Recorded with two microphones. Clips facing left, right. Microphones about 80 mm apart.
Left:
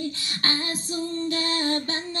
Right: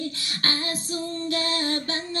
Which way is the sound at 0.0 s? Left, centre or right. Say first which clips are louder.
Left 1 dB; left.